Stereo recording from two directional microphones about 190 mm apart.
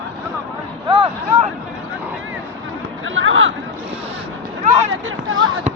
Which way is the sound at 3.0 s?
90° right.